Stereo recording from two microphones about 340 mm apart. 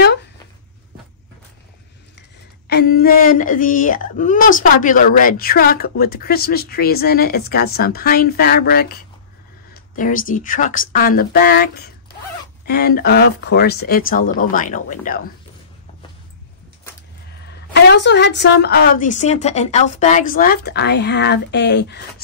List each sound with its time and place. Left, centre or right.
2.7 s a woman's voice: left
17.8 s a woman's voice: left